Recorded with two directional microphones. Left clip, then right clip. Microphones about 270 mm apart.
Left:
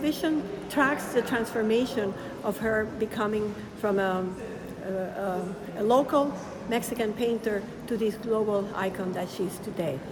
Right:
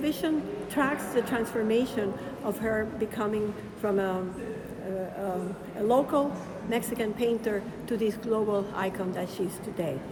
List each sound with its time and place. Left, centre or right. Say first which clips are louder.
0.0 s a woman's voice: left 1 dB; centre
5.9 s a woman's voice: left 2 dB; centre